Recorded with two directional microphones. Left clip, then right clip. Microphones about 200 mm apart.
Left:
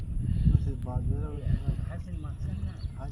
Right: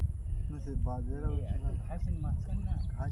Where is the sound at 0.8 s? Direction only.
10° left (ahead or behind).